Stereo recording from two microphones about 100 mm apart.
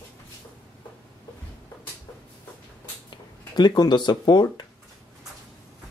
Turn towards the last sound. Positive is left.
turn(degrees=45)  # may be behind; listen again after turning